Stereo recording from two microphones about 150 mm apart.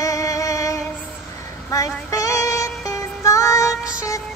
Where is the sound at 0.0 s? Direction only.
20° left (ahead or behind).